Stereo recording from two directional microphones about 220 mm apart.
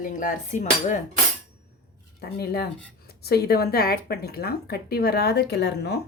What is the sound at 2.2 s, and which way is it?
A woman's voice, 45° left (ahead or behind).